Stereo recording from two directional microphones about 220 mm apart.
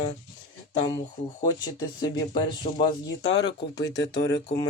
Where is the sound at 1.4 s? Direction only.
20° left (ahead or behind).